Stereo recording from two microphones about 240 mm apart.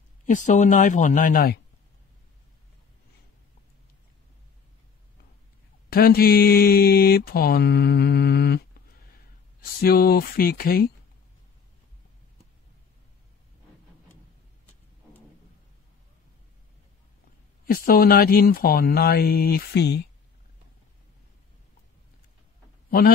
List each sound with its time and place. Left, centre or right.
0.3 s speech: left
5.9 s speech: left
17.6 s speech: left
22.8 s a man's voice: left